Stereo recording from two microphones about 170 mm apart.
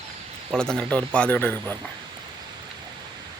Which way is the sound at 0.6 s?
5° left (ahead or behind).